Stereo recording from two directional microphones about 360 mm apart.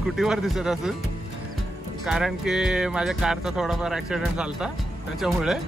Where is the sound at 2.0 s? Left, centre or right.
Centre.